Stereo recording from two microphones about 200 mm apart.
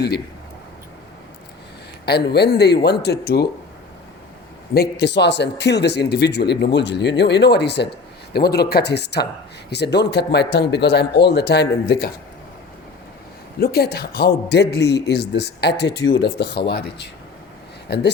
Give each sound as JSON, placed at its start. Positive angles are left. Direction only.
{"t": 2.0, "sound": "speech", "side_deg": 55}
{"t": 4.7, "sound": "speech", "side_deg": 55}
{"t": 13.6, "sound": "speech", "side_deg": 50}